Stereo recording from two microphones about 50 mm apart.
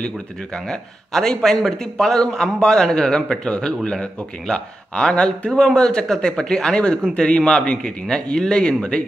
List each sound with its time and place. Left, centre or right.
0.7 s a man's voice: centre